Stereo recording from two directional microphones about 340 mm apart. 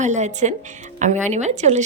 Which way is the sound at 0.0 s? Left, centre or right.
Right.